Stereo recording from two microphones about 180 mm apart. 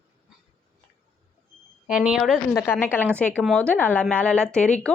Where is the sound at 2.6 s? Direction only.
10° left (ahead or behind).